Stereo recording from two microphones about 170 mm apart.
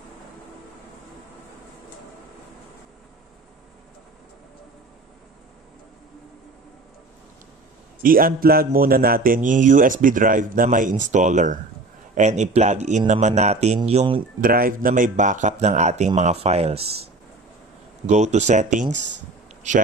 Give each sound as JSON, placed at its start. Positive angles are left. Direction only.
{"t": 8.0, "sound": "a man's voice", "side_deg": -55}
{"t": 14.4, "sound": "a man's voice", "side_deg": -55}